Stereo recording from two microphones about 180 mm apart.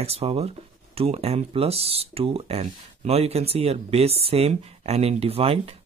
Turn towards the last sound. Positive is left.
turn(degrees=-35)  # may be behind; listen again after turning